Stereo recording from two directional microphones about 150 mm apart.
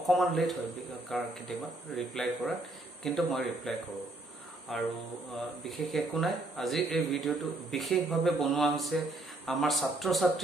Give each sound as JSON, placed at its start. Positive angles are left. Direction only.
{"t": 0.0, "sound": "speech", "side_deg": 0}